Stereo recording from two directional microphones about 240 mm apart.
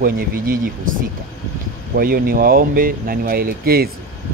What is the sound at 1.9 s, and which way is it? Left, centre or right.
Speech, right.